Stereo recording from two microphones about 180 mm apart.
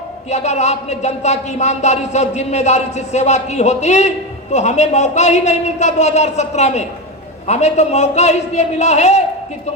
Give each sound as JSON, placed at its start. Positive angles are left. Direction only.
{"t": 0.3, "sound": "speech", "side_deg": 40}